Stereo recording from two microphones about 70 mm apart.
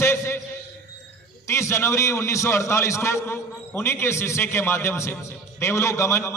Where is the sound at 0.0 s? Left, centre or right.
Left.